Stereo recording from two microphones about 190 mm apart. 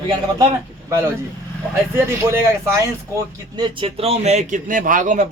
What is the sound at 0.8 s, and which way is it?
Speech, 15° right (ahead or behind).